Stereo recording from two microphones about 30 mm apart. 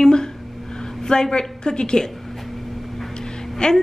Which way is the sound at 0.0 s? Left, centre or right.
Left.